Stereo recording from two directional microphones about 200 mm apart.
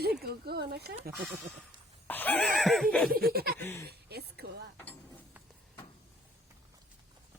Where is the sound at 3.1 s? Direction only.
50° right (ahead or behind).